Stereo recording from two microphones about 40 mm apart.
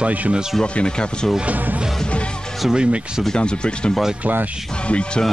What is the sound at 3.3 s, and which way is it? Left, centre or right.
Speech, left.